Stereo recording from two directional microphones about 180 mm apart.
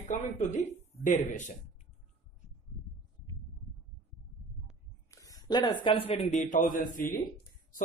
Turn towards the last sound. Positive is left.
turn(degrees=50)  # may be behind; listen again after turning